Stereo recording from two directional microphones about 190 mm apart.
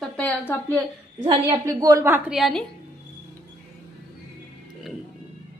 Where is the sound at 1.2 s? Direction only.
25° right (ahead or behind); by 2.6 s centre (ahead or behind).